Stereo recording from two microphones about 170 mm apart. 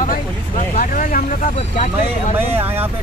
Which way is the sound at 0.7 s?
50° left (ahead or behind).